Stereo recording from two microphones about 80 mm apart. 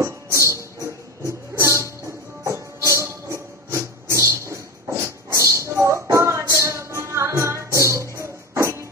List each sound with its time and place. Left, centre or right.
0.0 s music: right